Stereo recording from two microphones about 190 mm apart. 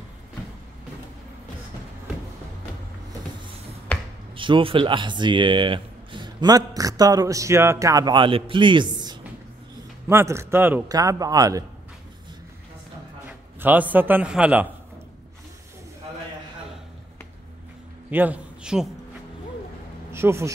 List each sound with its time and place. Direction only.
4.4 s a man's voice: 25° right (ahead or behind)
13.6 s a man's voice: 10° right (ahead or behind)
18.1 s a man's voice: 10° right (ahead or behind)
20.1 s speech: 15° right (ahead or behind)